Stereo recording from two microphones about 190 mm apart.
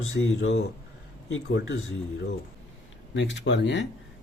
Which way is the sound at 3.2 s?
75° left (ahead or behind).